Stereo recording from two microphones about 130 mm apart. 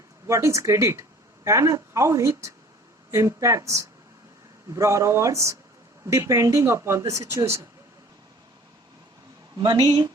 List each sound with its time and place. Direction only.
0.3 s speech: 25° right (ahead or behind)
9.6 s speech: 30° right (ahead or behind)